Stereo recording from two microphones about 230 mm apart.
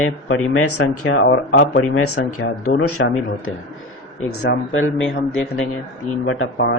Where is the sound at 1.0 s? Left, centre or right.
Left.